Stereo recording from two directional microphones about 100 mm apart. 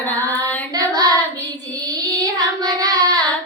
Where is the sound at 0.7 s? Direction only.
35° right (ahead or behind).